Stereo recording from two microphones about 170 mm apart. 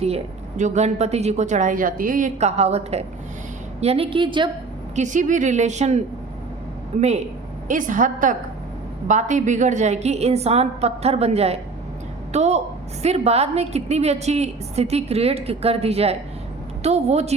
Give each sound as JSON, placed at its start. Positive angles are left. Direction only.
{"t": 0.0, "sound": "a woman's voice", "side_deg": -40}
{"t": 4.9, "sound": "a woman's voice", "side_deg": -45}